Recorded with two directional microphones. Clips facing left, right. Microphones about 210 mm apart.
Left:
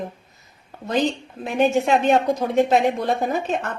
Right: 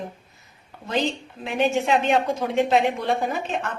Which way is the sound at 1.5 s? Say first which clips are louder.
Left 3 dB; 40° left (ahead or behind).